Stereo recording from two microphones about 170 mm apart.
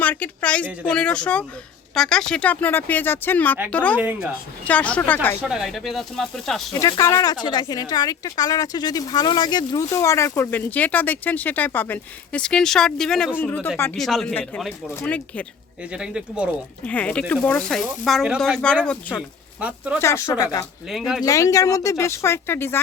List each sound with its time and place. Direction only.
0.0 s a woman's voice: 10° left (ahead or behind)
3.9 s speech: 10° right (ahead or behind)
4.6 s speech: 10° left (ahead or behind)
5.4 s speech: 5° right (ahead or behind)
6.7 s speech: 20° left (ahead or behind)
15.9 s speech: 5° right (ahead or behind)
16.8 s speech: 10° left (ahead or behind)
19.5 s speech: 5° right (ahead or behind)
20.0 s speech: 15° left (ahead or behind)
20.9 s speech: centre (ahead or behind)
21.2 s speech: 20° left (ahead or behind)